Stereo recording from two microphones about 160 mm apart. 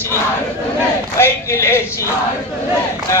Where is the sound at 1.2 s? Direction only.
15° left (ahead or behind).